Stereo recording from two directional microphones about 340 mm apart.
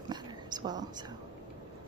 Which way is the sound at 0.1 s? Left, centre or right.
Centre.